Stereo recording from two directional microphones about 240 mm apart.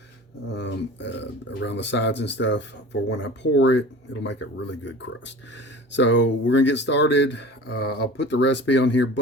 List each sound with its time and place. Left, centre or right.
0.5 s speech: left